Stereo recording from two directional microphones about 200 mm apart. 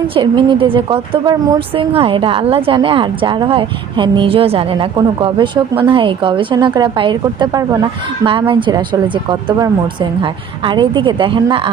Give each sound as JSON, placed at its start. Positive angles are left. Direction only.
{"t": 0.1, "sound": "a woman's voice", "side_deg": -25}